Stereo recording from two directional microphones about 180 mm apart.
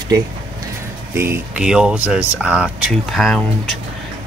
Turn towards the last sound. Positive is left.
turn(degrees=0)  # may be behind; listen again after turning